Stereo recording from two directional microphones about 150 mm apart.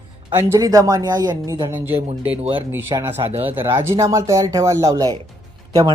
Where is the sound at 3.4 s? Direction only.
15° right (ahead or behind).